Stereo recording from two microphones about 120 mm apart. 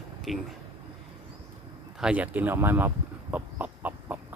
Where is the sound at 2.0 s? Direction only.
10° right (ahead or behind).